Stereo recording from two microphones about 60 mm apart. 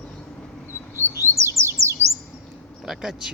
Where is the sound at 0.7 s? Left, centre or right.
Left.